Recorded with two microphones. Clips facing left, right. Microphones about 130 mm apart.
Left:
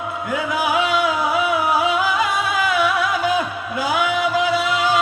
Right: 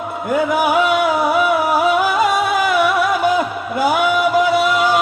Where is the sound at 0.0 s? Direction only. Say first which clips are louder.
Right 5 dB; 55° right (ahead or behind).